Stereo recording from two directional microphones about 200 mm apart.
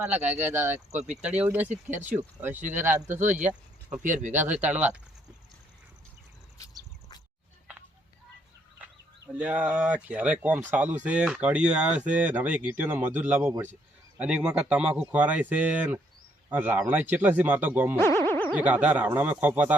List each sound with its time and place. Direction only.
0.3 s speech: 10° right (ahead or behind)
3.2 s speech: 40° right (ahead or behind)
3.4 s a sound: 5° right (ahead or behind)
4.0 s speech: 40° right (ahead or behind)
4.6 s speech: 5° right (ahead or behind)
8.8 s speech: 10° right (ahead or behind)
17.9 s boing: 10° left (ahead or behind)
18.5 s speech: 5° right (ahead or behind)